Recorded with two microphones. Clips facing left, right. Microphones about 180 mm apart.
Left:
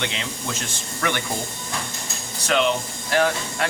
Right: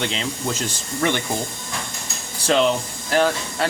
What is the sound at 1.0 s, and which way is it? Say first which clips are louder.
Speech: right 4 dB; 25° right (ahead or behind).